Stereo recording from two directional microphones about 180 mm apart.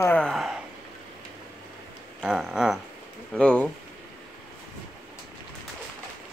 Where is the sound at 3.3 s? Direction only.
5° left (ahead or behind).